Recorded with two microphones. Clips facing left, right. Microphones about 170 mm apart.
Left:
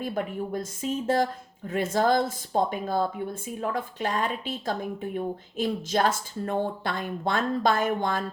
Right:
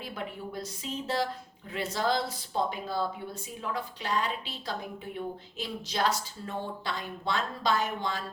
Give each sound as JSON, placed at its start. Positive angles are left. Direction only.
{"t": 0.0, "sound": "speech", "side_deg": 50}